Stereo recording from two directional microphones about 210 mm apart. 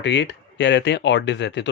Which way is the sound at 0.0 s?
55° left (ahead or behind).